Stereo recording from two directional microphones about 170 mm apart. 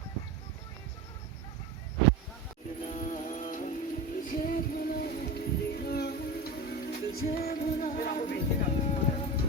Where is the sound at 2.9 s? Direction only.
45° left (ahead or behind).